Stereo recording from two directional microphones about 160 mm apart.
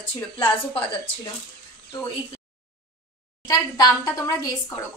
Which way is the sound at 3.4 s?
25° left (ahead or behind).